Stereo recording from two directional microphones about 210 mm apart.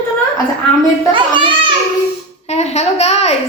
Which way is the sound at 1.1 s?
25° right (ahead or behind).